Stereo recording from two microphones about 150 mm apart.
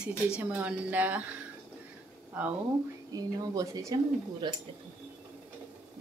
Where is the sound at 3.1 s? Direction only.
25° right (ahead or behind).